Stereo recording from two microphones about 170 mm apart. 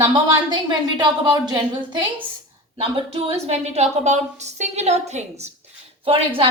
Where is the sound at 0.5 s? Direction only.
25° right (ahead or behind).